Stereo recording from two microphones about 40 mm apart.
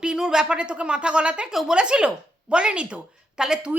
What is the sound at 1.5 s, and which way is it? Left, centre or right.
Speech, centre.